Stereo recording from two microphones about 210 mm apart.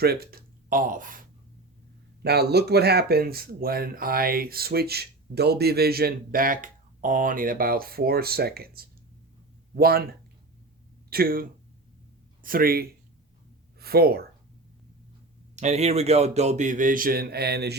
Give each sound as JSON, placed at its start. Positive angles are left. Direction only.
{"t": 0.0, "sound": "speech", "side_deg": -50}
{"t": 2.2, "sound": "speech", "side_deg": -50}
{"t": 15.5, "sound": "speech", "side_deg": -30}